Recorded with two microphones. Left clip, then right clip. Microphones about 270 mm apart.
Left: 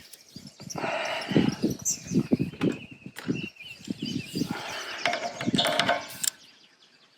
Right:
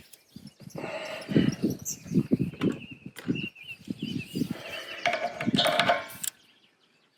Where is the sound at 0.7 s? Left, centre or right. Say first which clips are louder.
Left 6 dB; left.